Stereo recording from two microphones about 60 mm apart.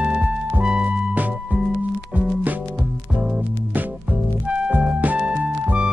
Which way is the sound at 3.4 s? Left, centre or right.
Right.